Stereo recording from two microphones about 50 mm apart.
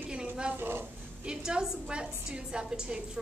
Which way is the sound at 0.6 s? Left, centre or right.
Right.